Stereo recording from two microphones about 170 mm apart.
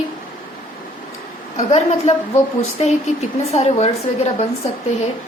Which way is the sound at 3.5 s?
40° left (ahead or behind).